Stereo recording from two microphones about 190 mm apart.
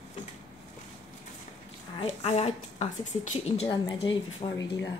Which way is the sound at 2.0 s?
35° left (ahead or behind).